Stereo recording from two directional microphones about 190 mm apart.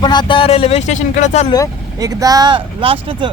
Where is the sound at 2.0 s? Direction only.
20° right (ahead or behind).